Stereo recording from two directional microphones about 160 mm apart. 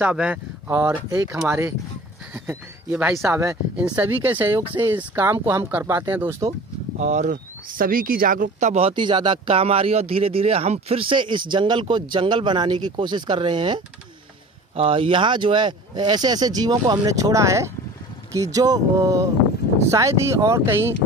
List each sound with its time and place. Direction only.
0.0 s speech: 10° right (ahead or behind)
7.0 s speech: 50° right (ahead or behind); by 20.9 s 15° right (ahead or behind)